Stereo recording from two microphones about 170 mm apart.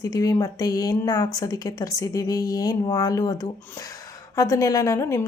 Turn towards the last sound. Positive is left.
turn(degrees=15)  # may be behind; listen again after turning